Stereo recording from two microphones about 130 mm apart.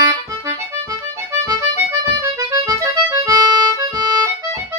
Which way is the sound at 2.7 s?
25° right (ahead or behind).